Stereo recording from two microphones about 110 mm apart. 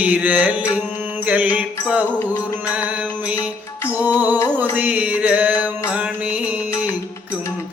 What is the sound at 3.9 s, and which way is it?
Music, 15° right (ahead or behind).